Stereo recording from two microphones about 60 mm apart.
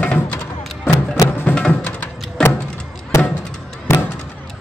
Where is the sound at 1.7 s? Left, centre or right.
Left.